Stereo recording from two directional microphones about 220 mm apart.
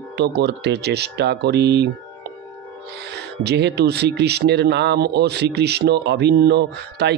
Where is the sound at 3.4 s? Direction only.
50° right (ahead or behind).